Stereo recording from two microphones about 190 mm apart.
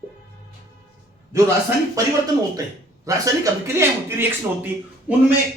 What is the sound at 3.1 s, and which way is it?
A man's voice, 15° right (ahead or behind).